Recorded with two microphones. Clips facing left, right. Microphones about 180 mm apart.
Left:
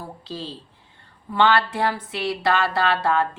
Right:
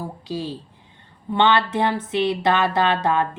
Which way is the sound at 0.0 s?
15° right (ahead or behind).